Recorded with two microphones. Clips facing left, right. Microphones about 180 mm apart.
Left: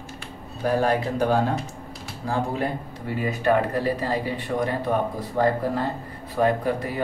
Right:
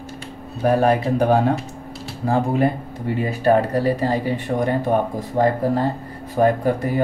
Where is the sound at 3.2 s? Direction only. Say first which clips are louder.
Right 4 dB; 35° right (ahead or behind).